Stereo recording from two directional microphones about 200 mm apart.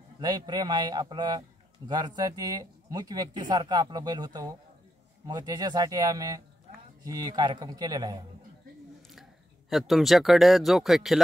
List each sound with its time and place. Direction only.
0.2 s speech: 20° right (ahead or behind)
9.1 s speech: centre (ahead or behind)